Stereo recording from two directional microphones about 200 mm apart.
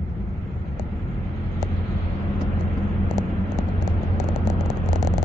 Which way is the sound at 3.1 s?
20° right (ahead or behind).